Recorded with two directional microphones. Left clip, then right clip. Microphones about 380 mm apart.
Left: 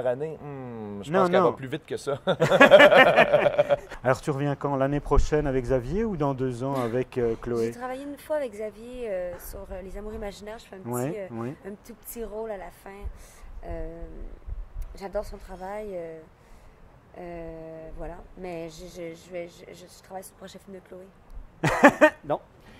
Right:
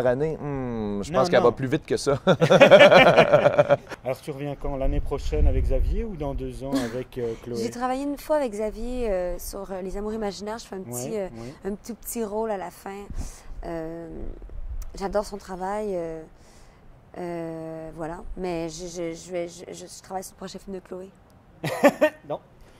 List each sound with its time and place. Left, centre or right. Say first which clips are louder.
0.0 s speech: right 5 dB; right
4.0 s speech: left 5 dB; left
7.6 s speech: right 4 dB; right
15.0 s speech: right 6 dB; right
21.5 s a sound: left 2 dB; left